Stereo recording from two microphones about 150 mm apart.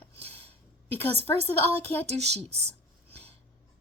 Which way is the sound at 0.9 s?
15° left (ahead or behind).